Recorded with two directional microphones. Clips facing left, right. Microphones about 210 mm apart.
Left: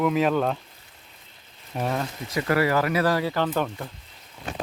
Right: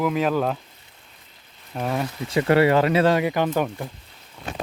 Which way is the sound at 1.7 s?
Centre (ahead or behind).